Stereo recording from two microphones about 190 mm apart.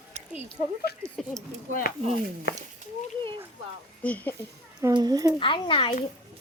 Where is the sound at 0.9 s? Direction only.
55° left (ahead or behind).